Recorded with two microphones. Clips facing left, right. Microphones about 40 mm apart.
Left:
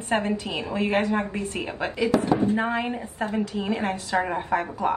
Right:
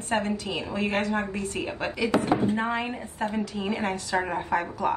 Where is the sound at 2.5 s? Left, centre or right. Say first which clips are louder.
Left 2 dB; centre.